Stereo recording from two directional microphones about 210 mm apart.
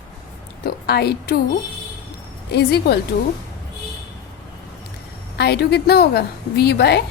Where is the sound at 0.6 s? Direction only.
50° left (ahead or behind).